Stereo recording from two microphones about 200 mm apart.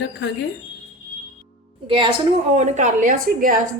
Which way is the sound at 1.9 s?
25° right (ahead or behind).